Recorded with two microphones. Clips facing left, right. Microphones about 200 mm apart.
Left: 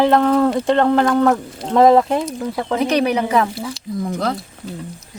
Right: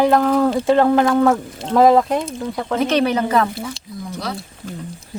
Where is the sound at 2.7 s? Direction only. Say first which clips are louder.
Even; 15° left (ahead or behind).